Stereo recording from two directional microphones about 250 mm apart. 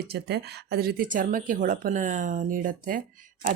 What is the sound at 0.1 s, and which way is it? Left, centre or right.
Speech, right.